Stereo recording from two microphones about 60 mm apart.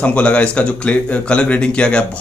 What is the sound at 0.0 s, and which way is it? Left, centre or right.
Speech, left.